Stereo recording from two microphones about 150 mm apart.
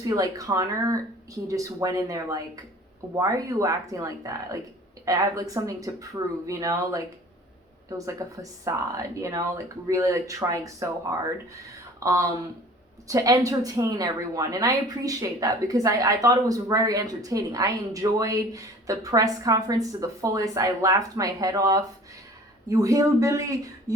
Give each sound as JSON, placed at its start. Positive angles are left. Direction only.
{"t": 0.0, "sound": "a woman's voice", "side_deg": -25}